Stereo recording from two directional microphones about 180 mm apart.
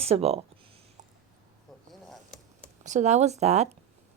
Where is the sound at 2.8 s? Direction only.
40° right (ahead or behind).